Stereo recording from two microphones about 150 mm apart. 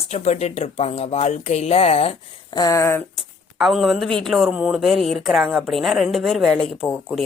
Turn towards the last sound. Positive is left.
turn(degrees=5)  # may be behind; listen again after turning